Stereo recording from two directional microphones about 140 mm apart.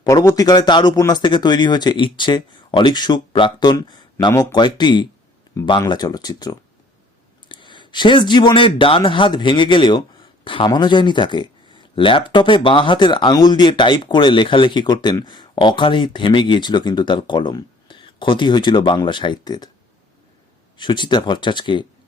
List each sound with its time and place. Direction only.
0.0 s speech: 25° left (ahead or behind)
4.3 s speech: 20° left (ahead or behind)
4.5 s speech: 30° left (ahead or behind)
20.7 s speech: 35° left (ahead or behind)